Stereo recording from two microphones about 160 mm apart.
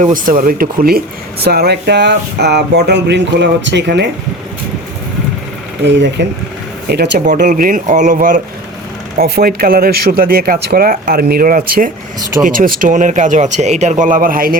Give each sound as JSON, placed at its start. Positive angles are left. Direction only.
{"t": 0.0, "sound": "speech", "side_deg": -55}
{"t": 1.5, "sound": "speech", "side_deg": -85}
{"t": 5.8, "sound": "speech", "side_deg": -90}
{"t": 7.3, "sound": "speech", "side_deg": -50}
{"t": 9.1, "sound": "speech", "side_deg": -75}